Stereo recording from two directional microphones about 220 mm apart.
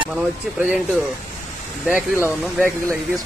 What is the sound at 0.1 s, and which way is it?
Speech, 5° right (ahead or behind).